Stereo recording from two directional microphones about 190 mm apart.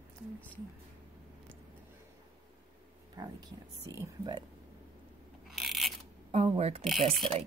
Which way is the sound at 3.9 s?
20° right (ahead or behind).